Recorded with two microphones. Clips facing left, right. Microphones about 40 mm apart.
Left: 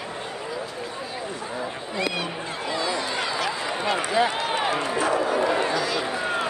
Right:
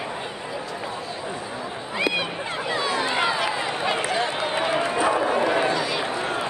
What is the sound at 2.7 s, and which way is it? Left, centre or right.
Run, right.